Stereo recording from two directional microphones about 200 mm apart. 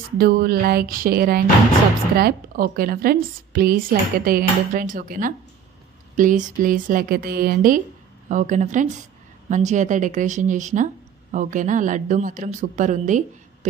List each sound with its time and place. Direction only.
0.2 s a woman's voice: 50° right (ahead or behind)